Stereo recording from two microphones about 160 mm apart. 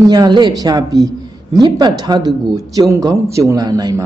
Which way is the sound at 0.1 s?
25° right (ahead or behind).